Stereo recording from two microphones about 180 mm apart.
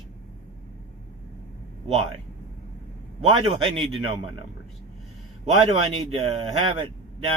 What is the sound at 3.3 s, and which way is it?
Speech, 30° right (ahead or behind).